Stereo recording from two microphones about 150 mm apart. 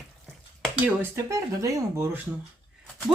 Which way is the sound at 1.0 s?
20° right (ahead or behind).